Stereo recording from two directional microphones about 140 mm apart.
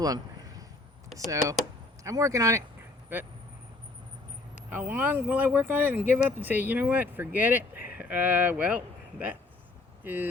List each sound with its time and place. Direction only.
1.3 s speech: 20° right (ahead or behind)
4.7 s speech: 15° right (ahead or behind)